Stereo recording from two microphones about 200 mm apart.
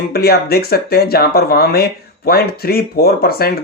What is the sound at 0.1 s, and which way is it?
Speech, 50° left (ahead or behind).